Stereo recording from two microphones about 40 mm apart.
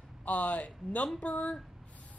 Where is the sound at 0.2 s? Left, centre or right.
Left.